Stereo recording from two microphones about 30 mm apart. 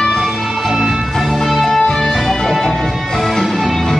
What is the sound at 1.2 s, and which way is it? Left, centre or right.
Music, centre.